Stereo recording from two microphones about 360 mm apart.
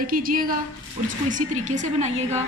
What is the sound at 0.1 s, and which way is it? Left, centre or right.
A woman's voice, right.